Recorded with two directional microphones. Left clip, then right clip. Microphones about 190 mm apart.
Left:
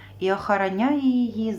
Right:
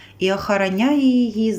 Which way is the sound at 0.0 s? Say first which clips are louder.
Right 4 dB; 5° right (ahead or behind).